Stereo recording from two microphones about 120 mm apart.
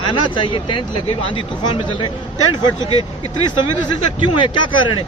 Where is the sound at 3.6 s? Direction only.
40° left (ahead or behind).